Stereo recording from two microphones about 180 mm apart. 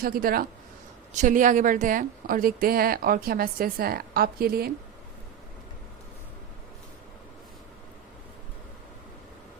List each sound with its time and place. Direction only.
0.0 s a woman's voice: 55° right (ahead or behind)
1.1 s a woman's voice: 45° right (ahead or behind); by 4.7 s 60° right (ahead or behind)